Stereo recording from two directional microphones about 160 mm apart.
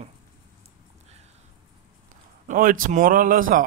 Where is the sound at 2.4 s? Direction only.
55° right (ahead or behind).